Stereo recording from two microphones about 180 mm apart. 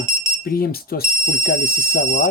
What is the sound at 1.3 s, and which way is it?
Speech, 70° left (ahead or behind).